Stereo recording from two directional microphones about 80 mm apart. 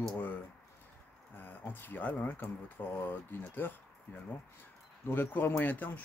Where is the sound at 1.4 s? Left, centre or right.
Left.